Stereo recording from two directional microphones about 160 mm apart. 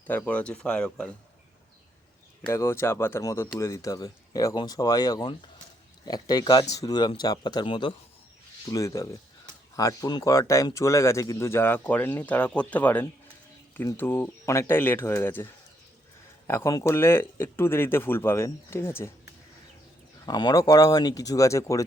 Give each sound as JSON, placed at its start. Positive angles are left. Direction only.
{"t": 0.1, "sound": "speech", "side_deg": 10}
{"t": 2.5, "sound": "speech", "side_deg": 15}
{"t": 8.7, "sound": "speech", "side_deg": 20}
{"t": 16.5, "sound": "speech", "side_deg": 20}
{"t": 20.2, "sound": "speech", "side_deg": 25}